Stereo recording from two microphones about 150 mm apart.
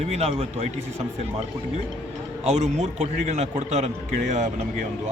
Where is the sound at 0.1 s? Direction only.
45° right (ahead or behind).